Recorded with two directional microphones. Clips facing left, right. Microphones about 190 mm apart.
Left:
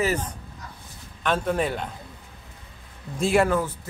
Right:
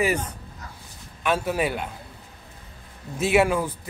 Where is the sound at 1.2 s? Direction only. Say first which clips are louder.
Even; 5° right (ahead or behind).